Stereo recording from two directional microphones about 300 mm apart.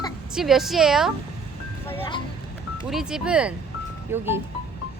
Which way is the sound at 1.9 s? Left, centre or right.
Centre.